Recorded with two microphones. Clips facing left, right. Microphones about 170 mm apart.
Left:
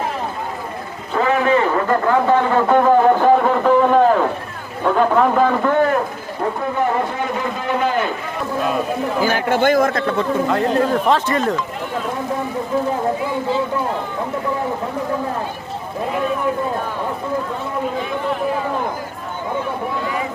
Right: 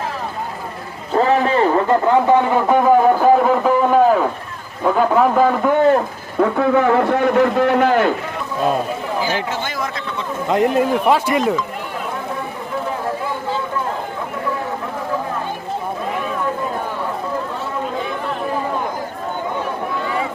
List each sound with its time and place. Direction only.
1.1 s a sound: 30° right (ahead or behind)
2.0 s speech: 15° right (ahead or behind)
6.6 s a man's voice: 85° right; by 8.1 s 70° right (ahead or behind)
9.2 s speech: 55° left (ahead or behind)
10.5 s speech: 15° right (ahead or behind)